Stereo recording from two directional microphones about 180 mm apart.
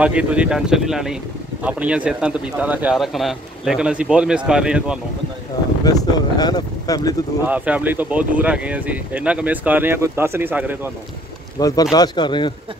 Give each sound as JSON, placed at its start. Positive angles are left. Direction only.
{"t": 0.0, "sound": "speech", "side_deg": -5}
{"t": 5.9, "sound": "speech", "side_deg": 20}
{"t": 7.4, "sound": "speech", "side_deg": -10}
{"t": 11.6, "sound": "speech", "side_deg": 20}